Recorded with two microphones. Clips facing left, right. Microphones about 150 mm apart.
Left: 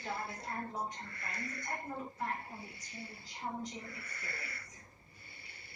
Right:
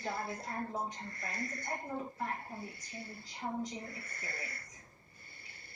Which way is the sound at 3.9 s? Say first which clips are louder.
Right 1 dB; 45° right (ahead or behind).